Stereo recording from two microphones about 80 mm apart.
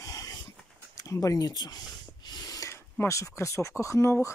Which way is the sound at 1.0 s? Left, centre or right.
Left.